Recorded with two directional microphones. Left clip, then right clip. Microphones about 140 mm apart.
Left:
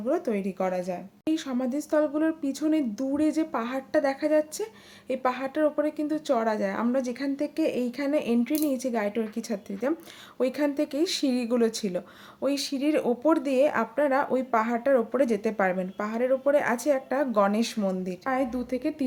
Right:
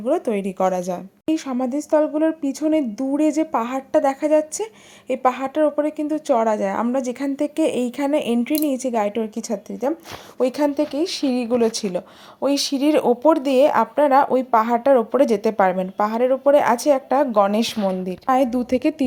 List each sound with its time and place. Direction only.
0.0 s speech: 30° right (ahead or behind)
0.6 s a woman's voice: 60° right (ahead or behind)
1.3 s speech: 30° right (ahead or behind)
10.4 s speech: 15° right (ahead or behind)
18.3 s a woman's voice: 50° right (ahead or behind)